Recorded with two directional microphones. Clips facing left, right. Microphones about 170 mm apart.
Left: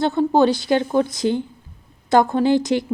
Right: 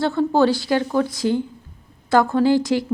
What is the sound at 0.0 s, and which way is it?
Speech, 20° left (ahead or behind).